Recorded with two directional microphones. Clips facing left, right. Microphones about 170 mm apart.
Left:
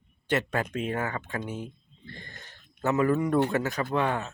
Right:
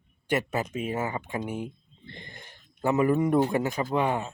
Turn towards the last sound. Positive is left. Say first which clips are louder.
# right 1 dB
turn(degrees=-15)  # may be behind; listen again after turning